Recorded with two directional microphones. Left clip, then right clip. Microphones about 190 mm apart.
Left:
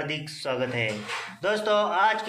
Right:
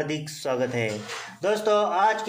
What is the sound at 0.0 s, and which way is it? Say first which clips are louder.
Speech: right 2 dB; 50° right (ahead or behind).